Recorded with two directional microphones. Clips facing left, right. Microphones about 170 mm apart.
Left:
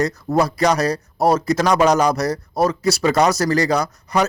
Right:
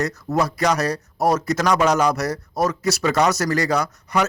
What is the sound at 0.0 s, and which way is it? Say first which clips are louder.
Speech: left 3 dB; 35° left (ahead or behind).